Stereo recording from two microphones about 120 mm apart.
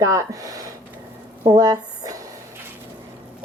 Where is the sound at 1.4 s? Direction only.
35° right (ahead or behind).